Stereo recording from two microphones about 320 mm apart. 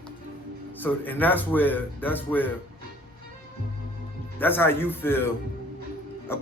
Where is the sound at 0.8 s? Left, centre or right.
Centre.